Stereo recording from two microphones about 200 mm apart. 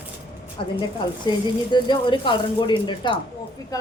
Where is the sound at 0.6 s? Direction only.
25° left (ahead or behind).